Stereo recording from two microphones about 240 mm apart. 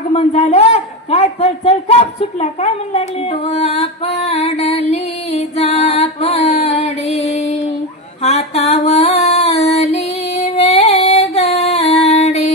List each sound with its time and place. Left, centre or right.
0.1 s a sound: left
3.4 s music: left
8.2 s female singing: left